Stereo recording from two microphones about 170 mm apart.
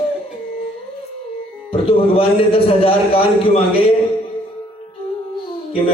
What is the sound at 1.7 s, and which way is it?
A man's voice, 35° left (ahead or behind).